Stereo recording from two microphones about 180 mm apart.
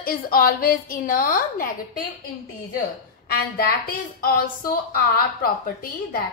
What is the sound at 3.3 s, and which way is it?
A woman's voice, 55° left (ahead or behind).